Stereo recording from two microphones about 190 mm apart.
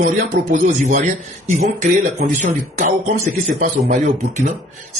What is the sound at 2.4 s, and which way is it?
Speech, 40° right (ahead or behind).